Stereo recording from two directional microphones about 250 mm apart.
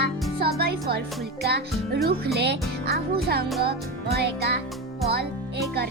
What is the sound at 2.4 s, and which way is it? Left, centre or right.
A child's voice, right.